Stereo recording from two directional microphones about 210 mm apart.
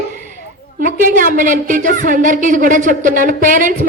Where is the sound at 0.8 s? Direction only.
40° right (ahead or behind).